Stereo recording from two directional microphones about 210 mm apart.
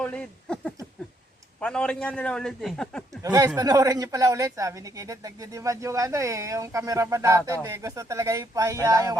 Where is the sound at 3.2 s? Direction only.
20° right (ahead or behind).